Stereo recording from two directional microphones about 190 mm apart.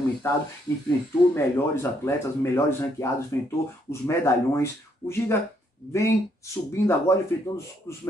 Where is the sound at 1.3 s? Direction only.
15° left (ahead or behind).